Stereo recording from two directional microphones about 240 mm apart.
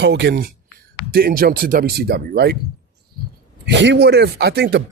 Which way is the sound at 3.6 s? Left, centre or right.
Right.